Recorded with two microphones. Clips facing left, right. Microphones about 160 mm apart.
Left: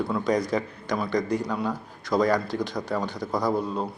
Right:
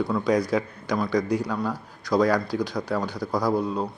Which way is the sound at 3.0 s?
20° left (ahead or behind).